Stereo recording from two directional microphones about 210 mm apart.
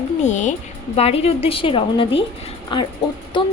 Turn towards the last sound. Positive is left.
turn(degrees=20)  # may be behind; listen again after turning